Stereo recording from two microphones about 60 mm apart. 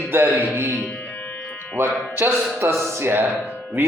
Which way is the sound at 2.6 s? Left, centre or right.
Right.